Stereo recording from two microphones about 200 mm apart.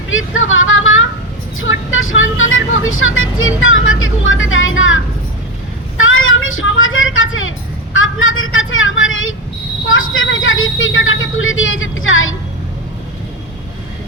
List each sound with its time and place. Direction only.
0.1 s vehicle: 80° left
6.0 s child singing: 85° left
7.9 s a woman's voice: 80° left